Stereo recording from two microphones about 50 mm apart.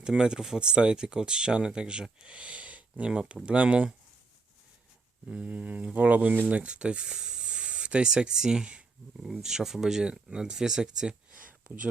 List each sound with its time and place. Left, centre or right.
0.0 s speech: centre
5.3 s speech: right
6.3 s speech: right
6.6 s speech: right
9.1 s speech: centre